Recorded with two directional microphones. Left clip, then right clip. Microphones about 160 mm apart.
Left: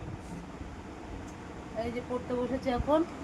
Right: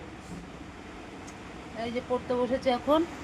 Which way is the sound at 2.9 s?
40° right (ahead or behind).